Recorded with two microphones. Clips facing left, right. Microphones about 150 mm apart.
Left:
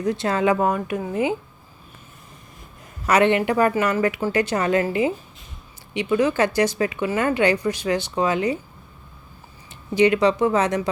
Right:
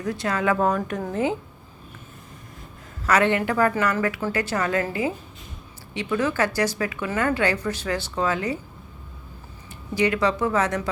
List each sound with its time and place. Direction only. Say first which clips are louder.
0.0 s a woman's voice: left 4 dB; 20° left (ahead or behind)
0.5 s speech: left 1 dB; 10° left (ahead or behind)
3.1 s a woman's voice: left 3 dB; 20° left (ahead or behind)
9.9 s a woman's voice: left 5 dB; 20° left (ahead or behind)